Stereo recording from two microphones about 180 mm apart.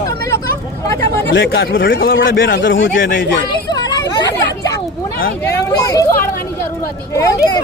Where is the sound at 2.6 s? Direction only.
90° left.